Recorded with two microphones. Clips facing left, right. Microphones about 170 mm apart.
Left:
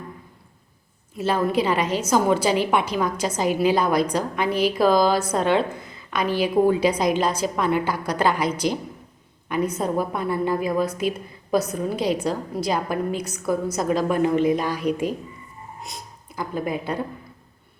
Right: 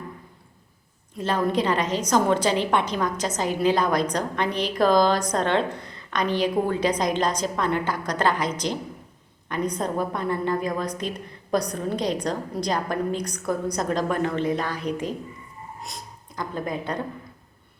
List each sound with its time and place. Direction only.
1.1 s a woman's voice: 10° left (ahead or behind)